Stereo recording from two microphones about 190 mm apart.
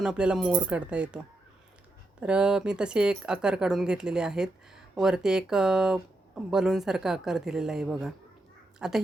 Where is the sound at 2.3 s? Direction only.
5° right (ahead or behind).